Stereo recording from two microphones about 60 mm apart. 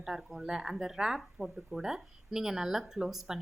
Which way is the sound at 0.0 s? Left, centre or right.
Centre.